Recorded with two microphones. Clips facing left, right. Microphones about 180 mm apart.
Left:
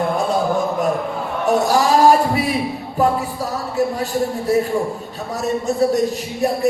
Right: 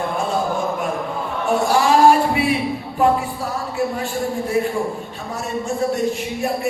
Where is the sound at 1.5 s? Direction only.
40° left (ahead or behind).